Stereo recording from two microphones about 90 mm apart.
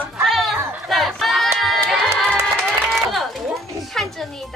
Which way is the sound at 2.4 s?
Centre (ahead or behind).